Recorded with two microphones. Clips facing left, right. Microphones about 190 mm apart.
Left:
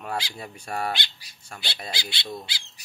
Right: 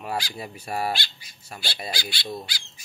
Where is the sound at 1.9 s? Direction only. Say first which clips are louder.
Right 2 dB; 20° left (ahead or behind).